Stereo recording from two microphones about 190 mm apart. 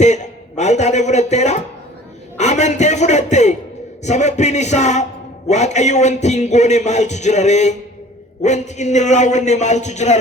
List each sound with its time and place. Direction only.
0.0 s a man's voice: 35° left (ahead or behind)